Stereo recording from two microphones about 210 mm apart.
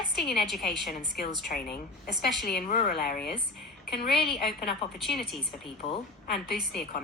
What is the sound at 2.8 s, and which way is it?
Speech, 50° left (ahead or behind).